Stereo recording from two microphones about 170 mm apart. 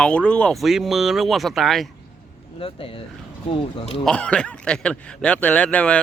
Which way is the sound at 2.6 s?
30° left (ahead or behind).